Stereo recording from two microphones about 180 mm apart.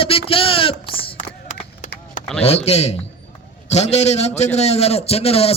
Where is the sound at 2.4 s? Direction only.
35° left (ahead or behind).